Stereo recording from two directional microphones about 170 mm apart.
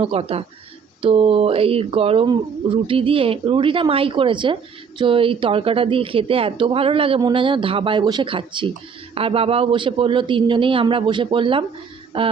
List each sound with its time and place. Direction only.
0.0 s speech: 35° right (ahead or behind)